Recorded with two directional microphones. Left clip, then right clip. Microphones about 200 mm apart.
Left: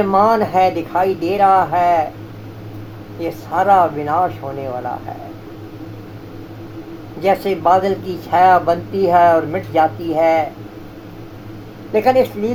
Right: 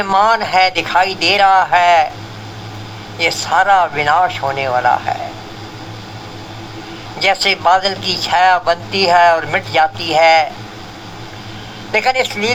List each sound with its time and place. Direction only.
0.0 s speech: 25° right (ahead or behind)
3.2 s speech: 25° right (ahead or behind)
7.2 s speech: 25° right (ahead or behind)
11.9 s speech: 25° right (ahead or behind)